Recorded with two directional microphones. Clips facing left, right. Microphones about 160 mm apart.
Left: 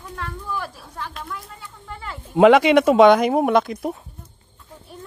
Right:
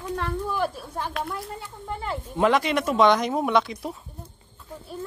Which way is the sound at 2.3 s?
85° left.